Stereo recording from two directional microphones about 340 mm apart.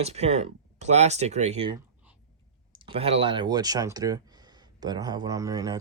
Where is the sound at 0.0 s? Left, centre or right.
Centre.